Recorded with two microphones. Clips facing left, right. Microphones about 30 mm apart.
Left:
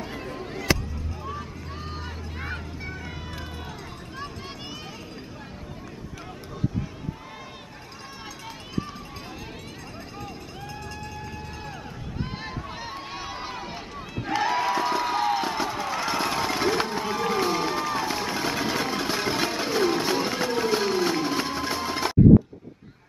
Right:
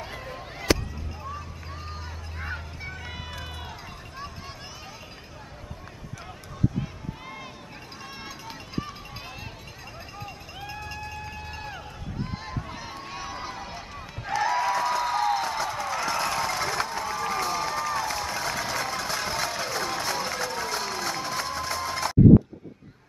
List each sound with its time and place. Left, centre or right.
2.4 s vehicle: centre
12.4 s run: centre
14.3 s a sound: centre